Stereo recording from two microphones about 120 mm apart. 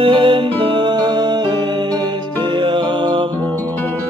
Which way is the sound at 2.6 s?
40° right (ahead or behind).